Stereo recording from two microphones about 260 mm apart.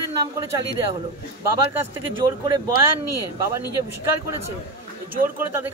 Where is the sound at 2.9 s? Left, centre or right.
Right.